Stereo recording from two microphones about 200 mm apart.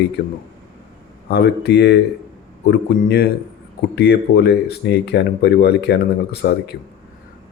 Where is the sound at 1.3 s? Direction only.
55° left (ahead or behind).